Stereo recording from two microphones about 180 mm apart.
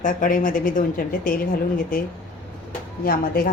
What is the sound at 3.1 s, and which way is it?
Speech, 50° left (ahead or behind).